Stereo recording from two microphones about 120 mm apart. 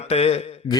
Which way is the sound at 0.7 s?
35° left (ahead or behind).